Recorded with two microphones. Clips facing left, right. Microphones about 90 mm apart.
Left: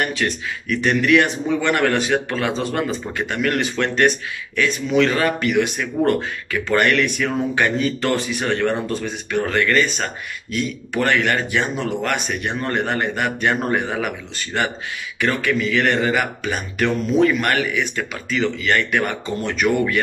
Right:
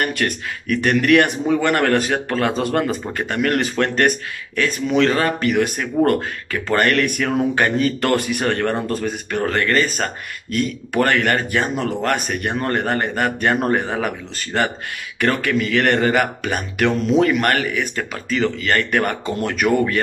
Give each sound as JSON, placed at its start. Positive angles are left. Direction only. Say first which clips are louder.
{"t": 0.0, "sound": "a man's voice", "louder": "right 1 dB", "side_deg": -55}
{"t": 15.1, "sound": "speech", "louder": "right 1 dB", "side_deg": -50}
{"t": 17.4, "sound": "speech", "louder": "right 1 dB", "side_deg": -45}